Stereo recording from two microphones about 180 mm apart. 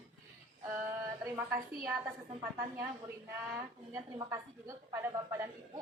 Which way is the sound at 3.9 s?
15° right (ahead or behind).